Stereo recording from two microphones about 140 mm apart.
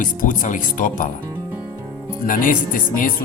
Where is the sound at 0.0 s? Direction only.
70° left (ahead or behind).